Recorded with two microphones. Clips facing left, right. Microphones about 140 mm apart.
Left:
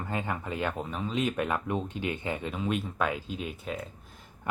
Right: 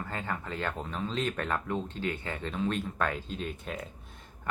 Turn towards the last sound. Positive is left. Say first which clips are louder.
# left 1 dB
turn(degrees=0)  # may be behind; listen again after turning